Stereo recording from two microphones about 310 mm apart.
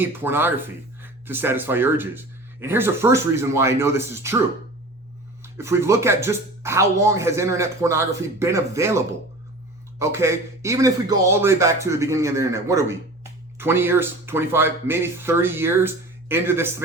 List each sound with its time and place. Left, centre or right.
0.0 s speech: centre
5.4 s speech: centre